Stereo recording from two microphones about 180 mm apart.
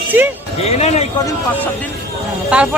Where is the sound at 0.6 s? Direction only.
35° left (ahead or behind).